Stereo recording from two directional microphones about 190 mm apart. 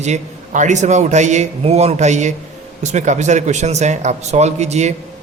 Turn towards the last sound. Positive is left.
turn(degrees=-35)  # may be behind; listen again after turning